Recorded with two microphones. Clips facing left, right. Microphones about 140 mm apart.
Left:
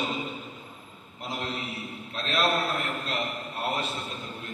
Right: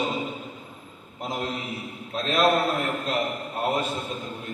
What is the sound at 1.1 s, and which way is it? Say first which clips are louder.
A man's voice: right 4 dB; 45° right (ahead or behind).